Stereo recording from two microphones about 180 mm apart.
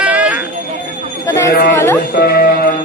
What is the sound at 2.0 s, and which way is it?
Music, 55° left (ahead or behind).